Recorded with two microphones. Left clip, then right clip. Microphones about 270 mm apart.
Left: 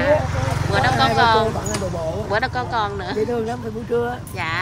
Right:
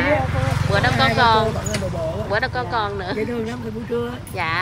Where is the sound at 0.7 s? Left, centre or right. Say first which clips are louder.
Left 1 dB; centre.